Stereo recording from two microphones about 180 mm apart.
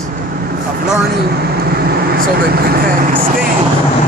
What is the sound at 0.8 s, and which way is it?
Speech, 60° right (ahead or behind).